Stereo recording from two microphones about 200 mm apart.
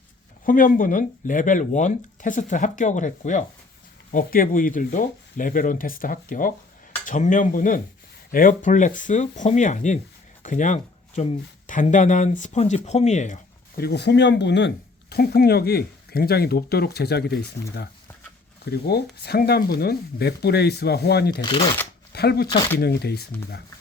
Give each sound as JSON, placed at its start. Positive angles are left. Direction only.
{"t": 0.4, "sound": "speech", "side_deg": 40}
{"t": 21.4, "sound": "speech", "side_deg": 25}
{"t": 22.1, "sound": "speech", "side_deg": 55}